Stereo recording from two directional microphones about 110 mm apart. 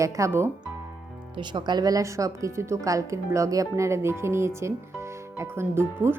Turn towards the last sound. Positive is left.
turn(degrees=-20)  # may be behind; listen again after turning